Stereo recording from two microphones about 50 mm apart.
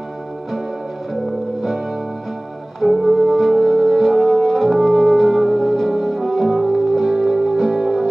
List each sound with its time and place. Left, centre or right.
2.8 s music: centre